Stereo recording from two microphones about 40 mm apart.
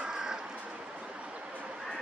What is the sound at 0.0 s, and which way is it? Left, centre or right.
Crow, centre.